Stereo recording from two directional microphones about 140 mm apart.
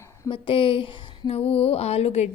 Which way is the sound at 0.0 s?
20° left (ahead or behind).